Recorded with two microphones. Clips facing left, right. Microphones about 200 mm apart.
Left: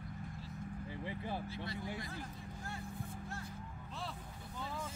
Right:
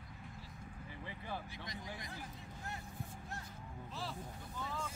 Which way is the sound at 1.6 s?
20° right (ahead or behind).